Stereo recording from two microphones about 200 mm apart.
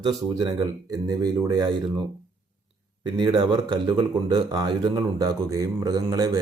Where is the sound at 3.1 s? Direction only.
20° right (ahead or behind).